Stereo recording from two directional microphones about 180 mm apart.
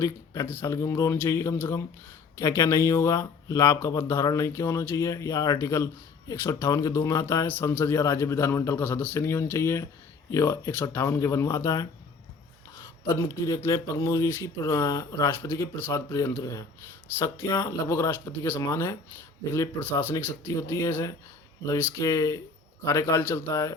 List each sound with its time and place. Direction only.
0.0 s speech: 15° left (ahead or behind)